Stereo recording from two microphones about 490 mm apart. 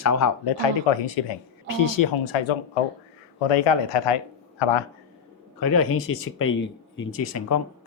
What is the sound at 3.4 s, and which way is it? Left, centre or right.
Speech, left.